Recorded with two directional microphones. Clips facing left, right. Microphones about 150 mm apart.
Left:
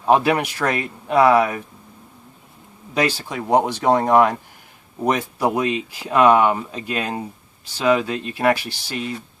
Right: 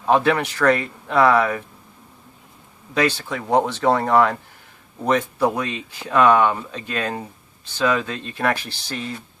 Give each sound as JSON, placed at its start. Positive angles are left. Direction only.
{"t": 0.1, "sound": "speech", "side_deg": 15}
{"t": 3.2, "sound": "speech", "side_deg": 15}